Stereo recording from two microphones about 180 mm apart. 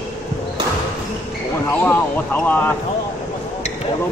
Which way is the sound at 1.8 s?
10° left (ahead or behind).